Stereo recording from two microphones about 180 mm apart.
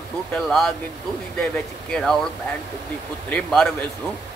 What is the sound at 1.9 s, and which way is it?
Speech, 5° left (ahead or behind).